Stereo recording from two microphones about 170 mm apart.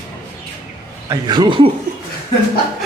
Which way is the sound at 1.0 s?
25° right (ahead or behind).